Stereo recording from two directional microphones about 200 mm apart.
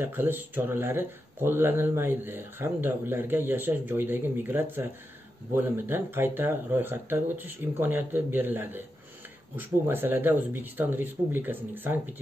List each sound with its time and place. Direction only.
0.0 s speech: 10° right (ahead or behind)